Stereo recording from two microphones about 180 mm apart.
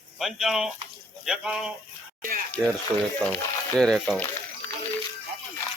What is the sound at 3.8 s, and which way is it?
Speech, 5° left (ahead or behind).